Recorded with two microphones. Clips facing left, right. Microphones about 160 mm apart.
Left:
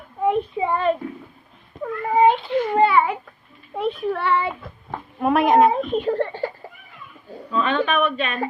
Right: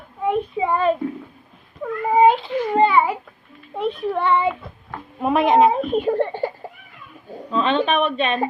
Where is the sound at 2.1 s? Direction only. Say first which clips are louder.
Right 2 dB; 10° right (ahead or behind).